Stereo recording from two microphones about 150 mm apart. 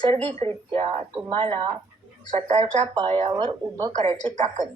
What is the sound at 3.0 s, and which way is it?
Speech, 40° right (ahead or behind).